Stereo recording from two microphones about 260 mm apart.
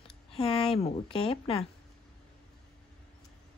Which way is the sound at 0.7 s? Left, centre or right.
Left.